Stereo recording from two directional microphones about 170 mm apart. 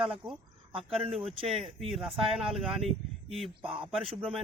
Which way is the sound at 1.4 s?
Centre (ahead or behind).